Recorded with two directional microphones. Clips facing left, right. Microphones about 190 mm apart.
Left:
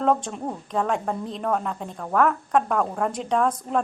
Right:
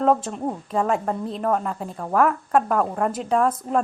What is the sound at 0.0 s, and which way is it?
A woman's voice, 5° right (ahead or behind).